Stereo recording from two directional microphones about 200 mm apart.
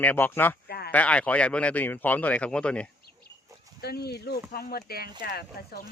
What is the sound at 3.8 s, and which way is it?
Speech, 50° left (ahead or behind).